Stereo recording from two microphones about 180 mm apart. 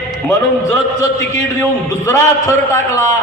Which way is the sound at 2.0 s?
15° left (ahead or behind).